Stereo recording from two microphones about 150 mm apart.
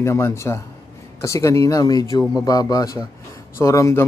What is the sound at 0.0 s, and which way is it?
A man's voice, 20° left (ahead or behind).